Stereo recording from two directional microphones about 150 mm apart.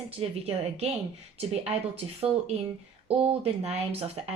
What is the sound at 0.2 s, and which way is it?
Speech, 40° right (ahead or behind).